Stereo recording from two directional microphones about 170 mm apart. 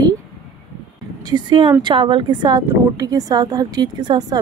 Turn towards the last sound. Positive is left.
turn(degrees=-25)  # may be behind; listen again after turning